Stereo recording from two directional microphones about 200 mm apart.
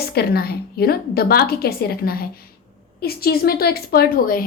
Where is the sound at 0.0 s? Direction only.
50° left (ahead or behind).